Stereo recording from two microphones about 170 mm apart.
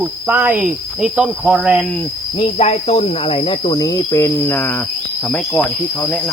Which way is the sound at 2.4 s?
40° left (ahead or behind).